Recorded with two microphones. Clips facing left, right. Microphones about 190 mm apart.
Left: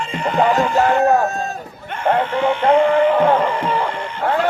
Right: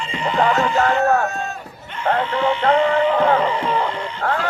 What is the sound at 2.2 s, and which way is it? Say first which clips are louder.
Speech: left 2 dB; 50° left (ahead or behind).